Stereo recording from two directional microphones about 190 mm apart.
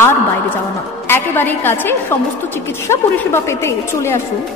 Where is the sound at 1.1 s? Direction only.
10° left (ahead or behind).